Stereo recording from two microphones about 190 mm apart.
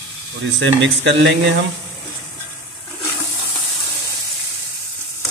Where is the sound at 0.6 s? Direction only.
70° right (ahead or behind).